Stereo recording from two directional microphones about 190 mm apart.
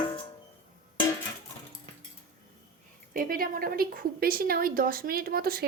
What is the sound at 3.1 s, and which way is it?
A woman's voice, 45° right (ahead or behind).